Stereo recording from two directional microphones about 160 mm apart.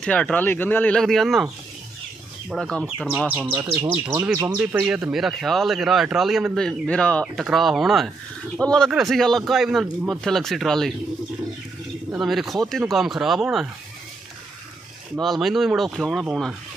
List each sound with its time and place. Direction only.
0.0 s speech: 5° left (ahead or behind)
2.5 s speech: centre (ahead or behind)
3.9 s speech: 15° right (ahead or behind); by 10.9 s centre (ahead or behind)
12.1 s speech: centre (ahead or behind)
15.1 s speech: centre (ahead or behind)